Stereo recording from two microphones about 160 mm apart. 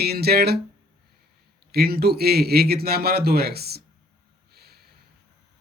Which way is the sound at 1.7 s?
75° right (ahead or behind).